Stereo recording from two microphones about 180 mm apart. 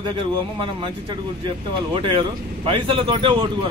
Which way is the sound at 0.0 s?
25° right (ahead or behind).